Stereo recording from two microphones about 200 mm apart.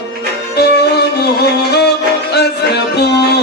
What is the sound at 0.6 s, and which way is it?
Music, 55° left (ahead or behind).